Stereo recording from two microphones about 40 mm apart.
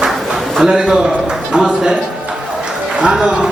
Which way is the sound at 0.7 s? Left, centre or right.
Right.